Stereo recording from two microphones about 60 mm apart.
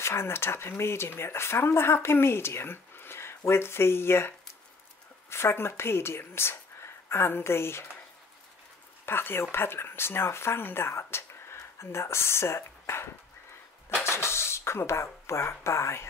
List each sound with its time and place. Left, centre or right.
0.0 s speech: left
5.3 s speech: left
9.0 s speech: left